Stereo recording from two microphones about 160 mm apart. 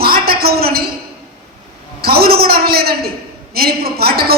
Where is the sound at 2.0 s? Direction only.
70° right (ahead or behind).